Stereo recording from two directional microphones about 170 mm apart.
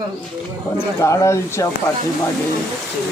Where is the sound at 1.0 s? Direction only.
15° left (ahead or behind).